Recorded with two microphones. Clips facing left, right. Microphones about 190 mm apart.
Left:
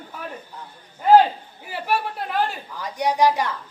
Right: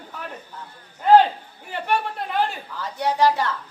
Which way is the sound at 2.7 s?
15° left (ahead or behind).